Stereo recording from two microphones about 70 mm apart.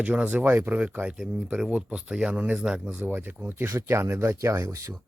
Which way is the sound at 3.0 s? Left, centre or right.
Right.